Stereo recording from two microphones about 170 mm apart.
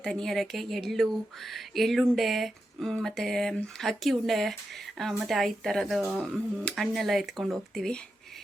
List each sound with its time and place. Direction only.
0.0 s speech: 5° left (ahead or behind)